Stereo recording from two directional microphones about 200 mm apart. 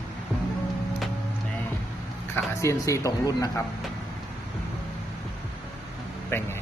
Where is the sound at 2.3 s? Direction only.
15° left (ahead or behind).